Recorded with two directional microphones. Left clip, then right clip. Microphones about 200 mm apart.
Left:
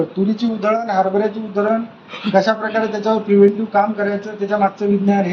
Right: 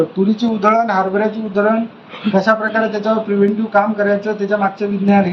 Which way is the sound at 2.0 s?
60° left (ahead or behind).